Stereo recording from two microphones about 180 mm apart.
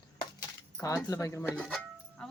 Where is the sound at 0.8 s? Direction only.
20° left (ahead or behind).